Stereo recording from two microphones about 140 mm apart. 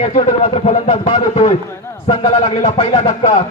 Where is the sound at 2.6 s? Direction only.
55° left (ahead or behind).